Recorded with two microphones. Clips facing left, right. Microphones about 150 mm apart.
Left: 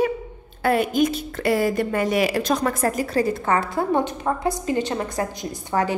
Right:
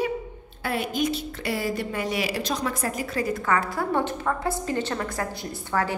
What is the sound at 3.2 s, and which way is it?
A woman's voice, 25° left (ahead or behind).